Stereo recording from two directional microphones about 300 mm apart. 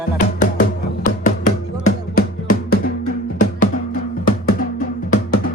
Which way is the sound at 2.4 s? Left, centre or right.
Left.